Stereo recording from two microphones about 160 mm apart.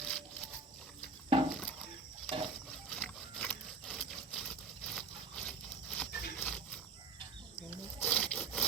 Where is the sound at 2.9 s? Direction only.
5° left (ahead or behind).